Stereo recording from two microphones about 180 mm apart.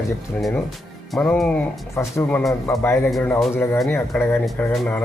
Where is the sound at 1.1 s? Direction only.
5° left (ahead or behind).